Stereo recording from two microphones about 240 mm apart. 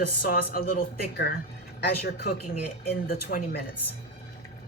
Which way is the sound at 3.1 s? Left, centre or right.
Left.